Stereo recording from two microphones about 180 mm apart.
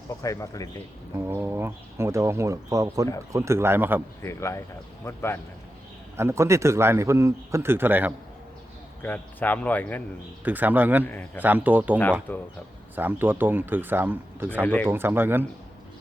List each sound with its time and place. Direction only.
0.2 s speech: 15° left (ahead or behind)
1.2 s a man's voice: 15° right (ahead or behind)
4.2 s speech: 15° left (ahead or behind)
6.1 s a man's voice: 15° right (ahead or behind)
9.0 s speech: 10° left (ahead or behind)
10.4 s a man's voice: 10° right (ahead or behind)
11.0 s speech: 10° left (ahead or behind)
11.4 s a man's voice: 10° right (ahead or behind)
12.3 s speech: 10° left (ahead or behind)
13.0 s a man's voice: 10° right (ahead or behind)
14.6 s speech: 5° left (ahead or behind)
14.8 s a man's voice: 10° right (ahead or behind)